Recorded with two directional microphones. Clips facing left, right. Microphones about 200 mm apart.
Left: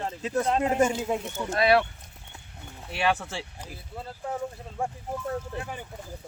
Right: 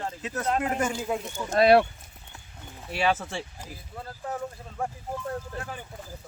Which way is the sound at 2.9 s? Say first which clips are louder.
Right 1 dB; centre (ahead or behind).